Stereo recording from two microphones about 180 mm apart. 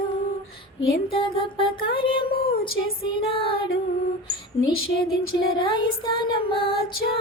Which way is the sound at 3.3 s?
30° left (ahead or behind).